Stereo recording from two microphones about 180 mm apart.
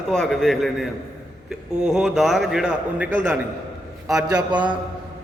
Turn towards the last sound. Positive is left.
turn(degrees=-5)  # may be behind; listen again after turning